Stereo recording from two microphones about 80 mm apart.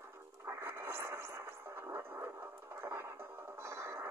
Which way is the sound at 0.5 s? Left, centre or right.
Right.